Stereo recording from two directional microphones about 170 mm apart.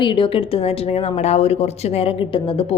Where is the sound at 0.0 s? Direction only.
30° left (ahead or behind).